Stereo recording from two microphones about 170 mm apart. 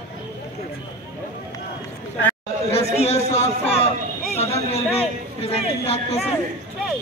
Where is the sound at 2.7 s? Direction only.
40° left (ahead or behind).